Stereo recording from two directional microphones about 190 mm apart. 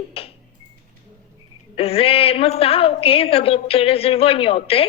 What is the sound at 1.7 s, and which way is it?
A woman's voice, 30° left (ahead or behind).